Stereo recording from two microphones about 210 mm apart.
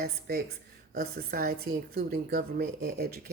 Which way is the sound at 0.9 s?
45° right (ahead or behind).